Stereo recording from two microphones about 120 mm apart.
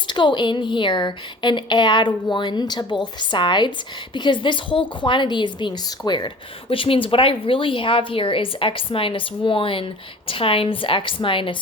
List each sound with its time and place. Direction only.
0.1 s a woman's voice: 40° left (ahead or behind)